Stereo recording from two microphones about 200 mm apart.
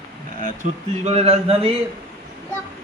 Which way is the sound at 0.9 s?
30° right (ahead or behind).